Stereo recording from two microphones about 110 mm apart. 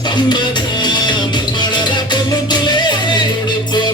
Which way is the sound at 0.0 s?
40° left (ahead or behind).